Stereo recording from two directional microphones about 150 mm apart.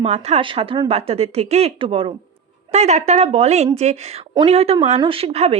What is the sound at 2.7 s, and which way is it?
A woman's voice, 50° right (ahead or behind).